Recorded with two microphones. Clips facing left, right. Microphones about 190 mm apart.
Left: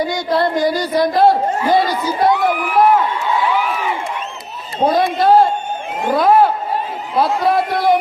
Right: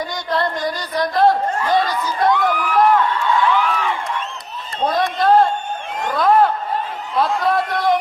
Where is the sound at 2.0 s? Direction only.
25° left (ahead or behind).